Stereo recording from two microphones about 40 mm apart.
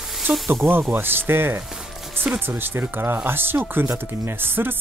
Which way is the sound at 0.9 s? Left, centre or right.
Right.